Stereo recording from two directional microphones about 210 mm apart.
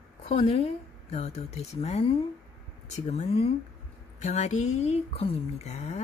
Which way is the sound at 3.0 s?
30° left (ahead or behind).